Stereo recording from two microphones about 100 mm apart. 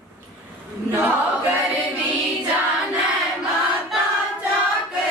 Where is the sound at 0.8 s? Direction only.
25° right (ahead or behind).